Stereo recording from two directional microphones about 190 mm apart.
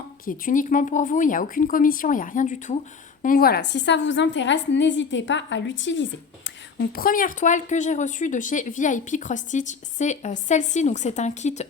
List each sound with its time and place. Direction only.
0.3 s speech: 45° left (ahead or behind)
3.2 s a woman's voice: 55° left (ahead or behind); by 6.8 s 75° left (ahead or behind)
6.9 s speech: 50° left (ahead or behind)